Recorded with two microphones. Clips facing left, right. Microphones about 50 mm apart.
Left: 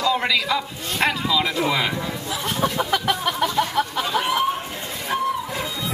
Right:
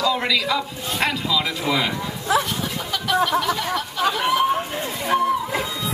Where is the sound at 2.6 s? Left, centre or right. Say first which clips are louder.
Left 6 dB; left.